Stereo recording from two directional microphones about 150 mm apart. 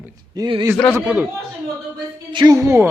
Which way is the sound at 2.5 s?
20° right (ahead or behind).